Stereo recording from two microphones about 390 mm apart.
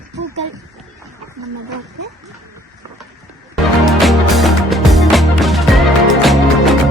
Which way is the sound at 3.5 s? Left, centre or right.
Centre.